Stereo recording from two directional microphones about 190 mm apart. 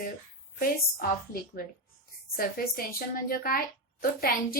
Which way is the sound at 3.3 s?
45° left (ahead or behind).